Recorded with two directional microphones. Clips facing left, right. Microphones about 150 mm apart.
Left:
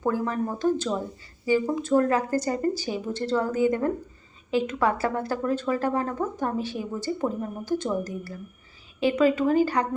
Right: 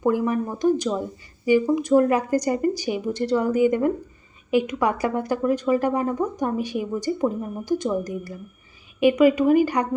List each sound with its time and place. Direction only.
0.0 s a woman's voice: 15° right (ahead or behind)